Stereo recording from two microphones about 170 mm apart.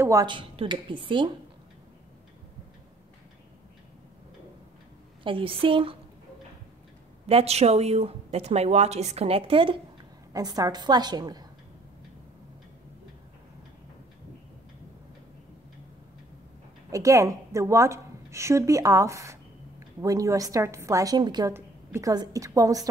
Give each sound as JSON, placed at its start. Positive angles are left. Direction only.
{"t": 0.0, "sound": "a woman's voice", "side_deg": -20}
{"t": 5.2, "sound": "a woman's voice", "side_deg": -30}
{"t": 7.2, "sound": "a woman's voice", "side_deg": -35}
{"t": 10.3, "sound": "a woman's voice", "side_deg": -20}
{"t": 16.9, "sound": "a woman's voice", "side_deg": -20}